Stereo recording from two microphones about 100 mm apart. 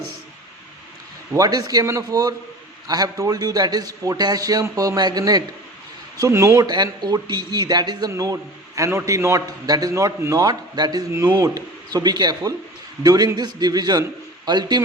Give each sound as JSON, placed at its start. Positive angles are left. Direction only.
{"t": 1.4, "sound": "a man's voice", "side_deg": -40}
{"t": 6.7, "sound": "a man's voice", "side_deg": -45}
{"t": 10.4, "sound": "a man's voice", "side_deg": -45}